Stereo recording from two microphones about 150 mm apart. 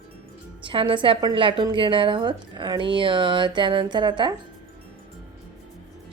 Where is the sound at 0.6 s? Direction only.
35° right (ahead or behind).